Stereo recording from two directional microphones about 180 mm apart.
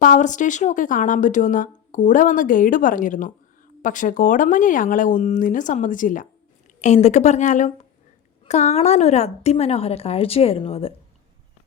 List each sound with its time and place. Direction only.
0.0 s a woman's voice: 45° left (ahead or behind)